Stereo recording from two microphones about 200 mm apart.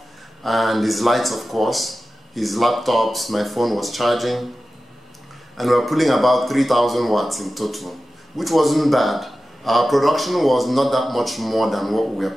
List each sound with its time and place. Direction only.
0.4 s speech: centre (ahead or behind)
5.6 s speech: centre (ahead or behind)